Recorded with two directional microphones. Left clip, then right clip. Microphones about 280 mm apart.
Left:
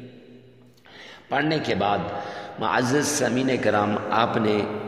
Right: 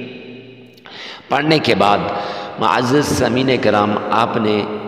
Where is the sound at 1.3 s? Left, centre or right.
Right.